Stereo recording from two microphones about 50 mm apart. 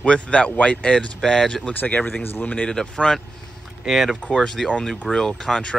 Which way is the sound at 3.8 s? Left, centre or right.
Centre.